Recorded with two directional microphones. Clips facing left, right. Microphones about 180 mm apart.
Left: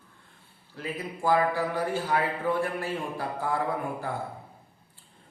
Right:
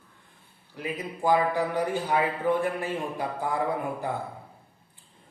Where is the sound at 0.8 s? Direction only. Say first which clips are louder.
Right 2 dB; 20° right (ahead or behind).